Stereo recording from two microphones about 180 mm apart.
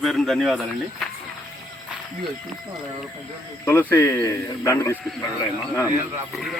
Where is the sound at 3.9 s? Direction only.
15° left (ahead or behind).